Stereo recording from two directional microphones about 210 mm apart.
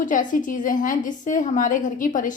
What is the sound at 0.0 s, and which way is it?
A woman's voice, 40° left (ahead or behind).